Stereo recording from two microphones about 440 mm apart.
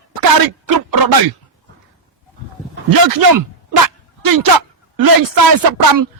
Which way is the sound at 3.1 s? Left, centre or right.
Right.